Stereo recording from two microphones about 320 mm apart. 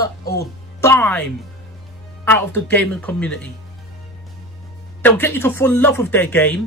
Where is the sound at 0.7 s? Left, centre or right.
Centre.